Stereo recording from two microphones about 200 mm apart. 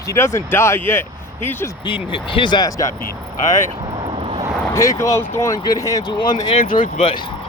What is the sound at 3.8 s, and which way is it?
Vehicle, 30° right (ahead or behind).